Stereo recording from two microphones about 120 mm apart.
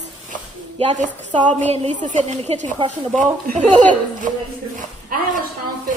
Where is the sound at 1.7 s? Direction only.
70° right (ahead or behind); by 3.8 s 90° right.